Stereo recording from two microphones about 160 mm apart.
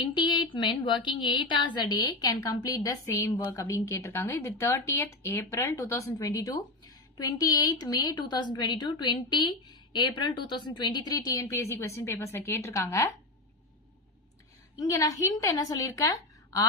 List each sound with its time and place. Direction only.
0.0 s a sound: 30° left (ahead or behind)
0.5 s a woman's voice: 30° left (ahead or behind)
14.8 s a woman's voice: 20° left (ahead or behind)